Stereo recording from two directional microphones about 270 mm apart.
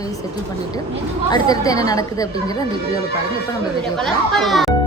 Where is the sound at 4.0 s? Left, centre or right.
Centre.